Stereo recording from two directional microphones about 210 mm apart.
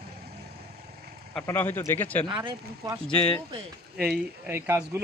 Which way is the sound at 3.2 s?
25° left (ahead or behind).